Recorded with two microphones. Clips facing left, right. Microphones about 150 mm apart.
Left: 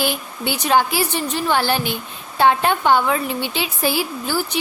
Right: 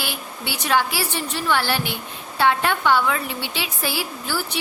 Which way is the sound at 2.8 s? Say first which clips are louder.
Left 2 dB; 40° left (ahead or behind).